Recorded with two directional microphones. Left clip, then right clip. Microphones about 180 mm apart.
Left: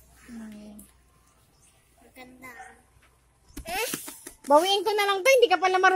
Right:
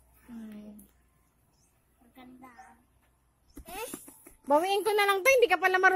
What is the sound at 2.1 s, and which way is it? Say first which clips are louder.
Speech: left 5 dB; 45° right (ahead or behind).